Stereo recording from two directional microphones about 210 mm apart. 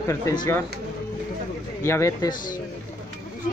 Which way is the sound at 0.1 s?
15° left (ahead or behind).